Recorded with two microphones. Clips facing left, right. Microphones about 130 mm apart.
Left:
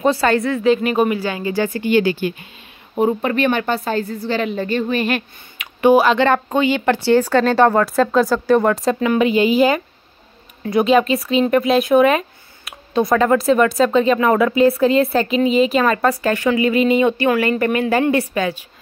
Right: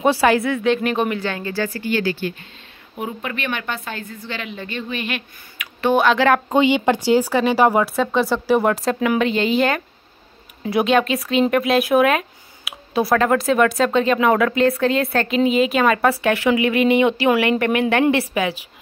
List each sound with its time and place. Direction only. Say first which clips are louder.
0.0 s a woman's voice: even; 10° right (ahead or behind); by 2.3 s 15° left (ahead or behind)
3.0 s a woman's voice: left 10 dB; 35° left (ahead or behind)
5.8 s speech: left 5 dB; 10° left (ahead or behind)
6.0 s speech: left 1 dB; 5° right (ahead or behind)
6.6 s a woman's voice: even; 20° right (ahead or behind); by 18.0 s centre (ahead or behind)
18.4 s speech: left 1 dB; 10° right (ahead or behind)